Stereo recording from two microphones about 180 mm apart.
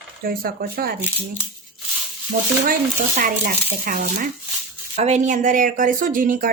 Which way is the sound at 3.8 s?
50° right (ahead or behind).